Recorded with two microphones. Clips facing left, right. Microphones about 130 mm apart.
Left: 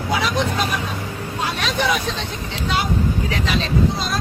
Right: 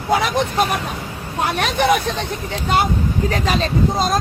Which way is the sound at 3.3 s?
45° right (ahead or behind).